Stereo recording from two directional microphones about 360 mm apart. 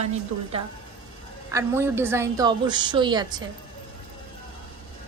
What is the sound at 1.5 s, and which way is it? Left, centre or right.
A woman's voice, centre.